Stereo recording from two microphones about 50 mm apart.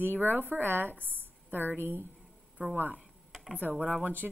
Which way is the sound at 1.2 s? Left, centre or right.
Right.